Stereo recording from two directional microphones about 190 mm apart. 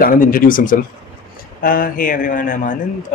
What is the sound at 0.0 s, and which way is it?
Speech, 45° left (ahead or behind).